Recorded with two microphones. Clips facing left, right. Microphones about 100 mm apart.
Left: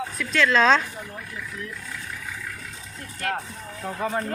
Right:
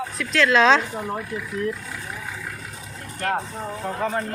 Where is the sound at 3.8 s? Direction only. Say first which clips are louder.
Right 2 dB; centre (ahead or behind).